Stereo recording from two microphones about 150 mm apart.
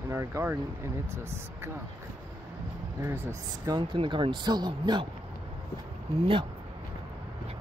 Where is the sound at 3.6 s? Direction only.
25° right (ahead or behind).